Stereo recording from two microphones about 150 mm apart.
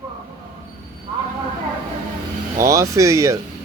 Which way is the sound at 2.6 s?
20° right (ahead or behind).